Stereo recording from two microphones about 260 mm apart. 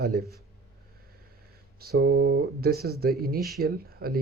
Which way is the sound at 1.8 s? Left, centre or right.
Right.